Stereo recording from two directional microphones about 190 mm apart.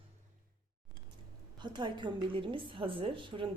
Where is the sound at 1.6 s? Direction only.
25° right (ahead or behind).